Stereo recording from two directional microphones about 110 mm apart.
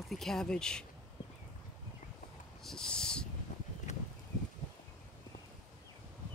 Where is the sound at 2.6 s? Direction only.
5° left (ahead or behind).